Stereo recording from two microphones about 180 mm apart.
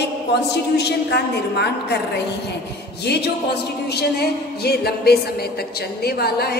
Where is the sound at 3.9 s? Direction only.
60° left (ahead or behind).